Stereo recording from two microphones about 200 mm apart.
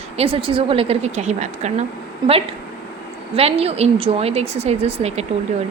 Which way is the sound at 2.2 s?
20° right (ahead or behind).